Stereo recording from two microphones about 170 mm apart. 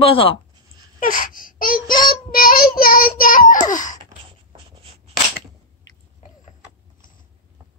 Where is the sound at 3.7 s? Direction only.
50° left (ahead or behind).